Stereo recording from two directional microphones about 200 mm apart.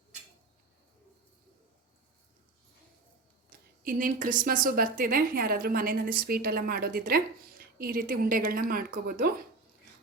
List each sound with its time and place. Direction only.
3.8 s a woman's voice: 45° right (ahead or behind)